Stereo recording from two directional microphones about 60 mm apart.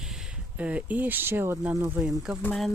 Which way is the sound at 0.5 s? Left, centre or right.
Right.